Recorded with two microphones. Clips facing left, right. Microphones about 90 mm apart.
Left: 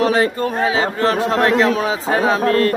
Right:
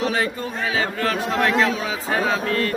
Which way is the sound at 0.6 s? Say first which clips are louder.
Left 5 dB; 30° left (ahead or behind).